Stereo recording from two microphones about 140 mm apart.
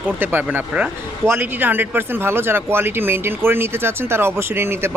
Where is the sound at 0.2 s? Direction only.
15° right (ahead or behind).